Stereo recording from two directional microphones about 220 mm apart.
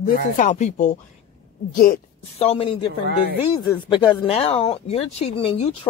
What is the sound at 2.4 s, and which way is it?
Speech, 25° left (ahead or behind).